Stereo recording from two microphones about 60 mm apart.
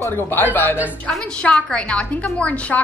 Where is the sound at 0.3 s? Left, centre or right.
Left.